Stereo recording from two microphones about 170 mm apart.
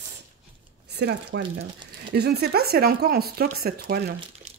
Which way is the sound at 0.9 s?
75° right (ahead or behind).